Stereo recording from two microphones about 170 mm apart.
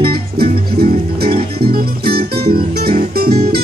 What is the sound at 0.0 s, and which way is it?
Music, 60° right (ahead or behind).